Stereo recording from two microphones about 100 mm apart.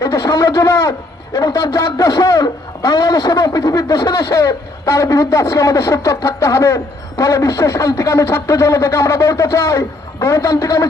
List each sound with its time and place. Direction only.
0.0 s a man's voice: 35° left (ahead or behind)